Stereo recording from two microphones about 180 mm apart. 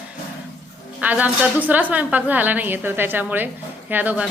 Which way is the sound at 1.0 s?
10° right (ahead or behind).